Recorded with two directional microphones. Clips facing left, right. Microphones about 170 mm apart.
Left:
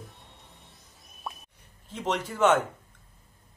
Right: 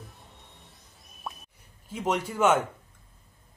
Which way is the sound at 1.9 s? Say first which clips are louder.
Right 2 dB; 10° right (ahead or behind).